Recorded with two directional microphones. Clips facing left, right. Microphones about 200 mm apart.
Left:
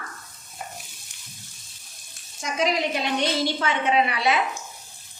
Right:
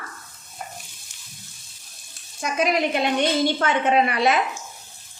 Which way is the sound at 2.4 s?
55° right (ahead or behind).